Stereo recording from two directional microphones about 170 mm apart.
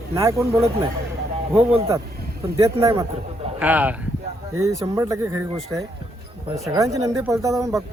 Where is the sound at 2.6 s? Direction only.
20° right (ahead or behind).